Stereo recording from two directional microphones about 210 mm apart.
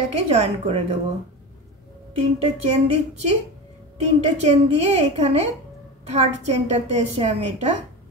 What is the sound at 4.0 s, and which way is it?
Speech, 30° right (ahead or behind).